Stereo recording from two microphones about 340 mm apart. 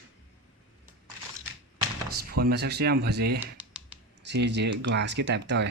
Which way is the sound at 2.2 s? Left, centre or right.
Right.